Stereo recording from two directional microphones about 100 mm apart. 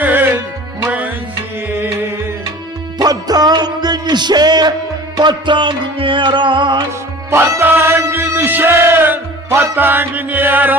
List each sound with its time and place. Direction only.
0.0 s music: 20° right (ahead or behind)
3.0 s music: 40° right (ahead or behind)
7.3 s music: 25° right (ahead or behind)